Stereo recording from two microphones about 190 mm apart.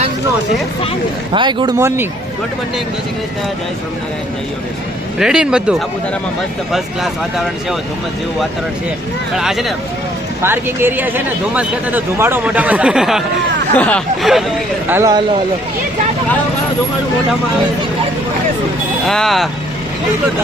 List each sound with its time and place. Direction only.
1.3 s speech: 25° right (ahead or behind)
5.2 s speech: 5° right (ahead or behind)
9.4 s speech: centre (ahead or behind)
14.8 s speech: 15° right (ahead or behind)
19.0 s speech: centre (ahead or behind)